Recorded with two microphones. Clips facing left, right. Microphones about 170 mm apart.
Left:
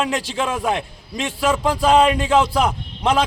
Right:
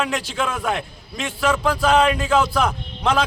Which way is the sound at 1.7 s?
20° left (ahead or behind).